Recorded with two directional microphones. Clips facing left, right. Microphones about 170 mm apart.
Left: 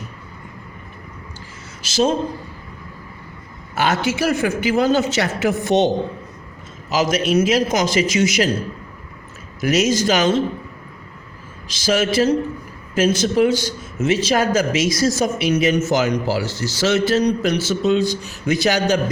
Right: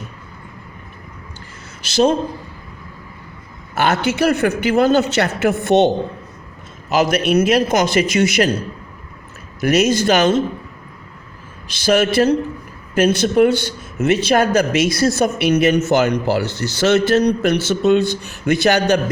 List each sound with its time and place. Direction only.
1.8 s a man's voice: 60° right (ahead or behind)
3.8 s a man's voice: 60° right (ahead or behind)
6.9 s a man's voice: 60° right (ahead or behind)
9.6 s a man's voice: 60° right (ahead or behind)
11.7 s a man's voice: 60° right (ahead or behind)